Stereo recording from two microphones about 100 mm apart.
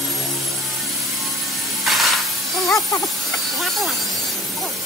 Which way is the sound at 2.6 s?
35° left (ahead or behind).